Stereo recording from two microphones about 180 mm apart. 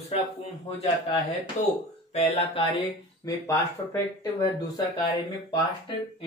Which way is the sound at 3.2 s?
20° left (ahead or behind).